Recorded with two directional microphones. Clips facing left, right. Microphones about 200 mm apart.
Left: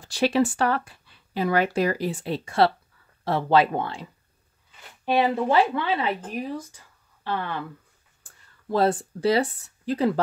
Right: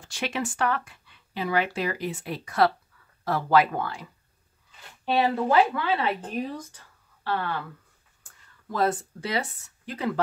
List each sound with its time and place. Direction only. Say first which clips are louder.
0.0 s speech: left 9 dB; 35° left (ahead or behind); by 6.8 s 10° left (ahead or behind)
7.2 s speech: even; 20° left (ahead or behind)